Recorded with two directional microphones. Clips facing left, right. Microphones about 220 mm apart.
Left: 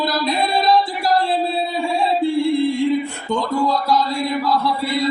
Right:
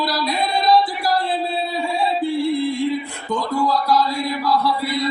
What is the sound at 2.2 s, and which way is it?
Music, 25° left (ahead or behind).